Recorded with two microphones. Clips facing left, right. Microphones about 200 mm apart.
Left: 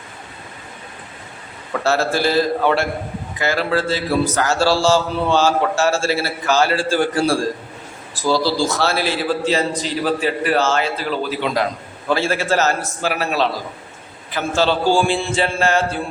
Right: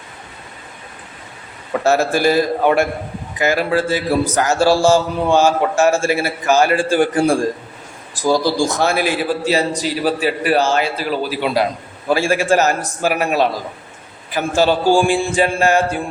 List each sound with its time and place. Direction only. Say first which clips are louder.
1.7 s a man's voice: right 3 dB; 15° right (ahead or behind)